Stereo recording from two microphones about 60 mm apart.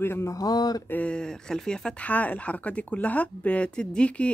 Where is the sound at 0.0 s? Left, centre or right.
Left.